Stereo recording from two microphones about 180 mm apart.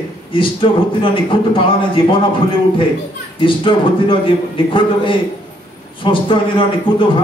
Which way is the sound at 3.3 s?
30° left (ahead or behind).